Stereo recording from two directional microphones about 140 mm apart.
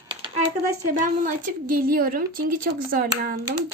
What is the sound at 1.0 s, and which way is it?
A woman's voice, 75° right (ahead or behind).